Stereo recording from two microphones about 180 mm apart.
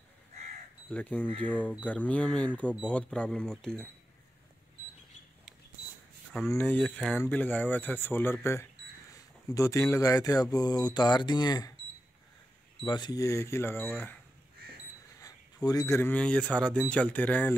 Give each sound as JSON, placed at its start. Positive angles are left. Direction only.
{"t": 0.8, "sound": "speech", "side_deg": 10}
{"t": 6.5, "sound": "speech", "side_deg": 10}
{"t": 9.5, "sound": "speech", "side_deg": 15}
{"t": 12.8, "sound": "speech", "side_deg": 25}
{"t": 15.1, "sound": "speech", "side_deg": 20}